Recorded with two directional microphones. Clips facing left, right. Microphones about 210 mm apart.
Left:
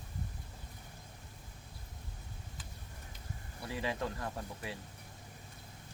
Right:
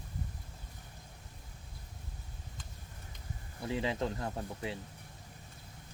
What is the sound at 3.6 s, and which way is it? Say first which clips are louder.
Speech: right 4 dB; 25° right (ahead or behind).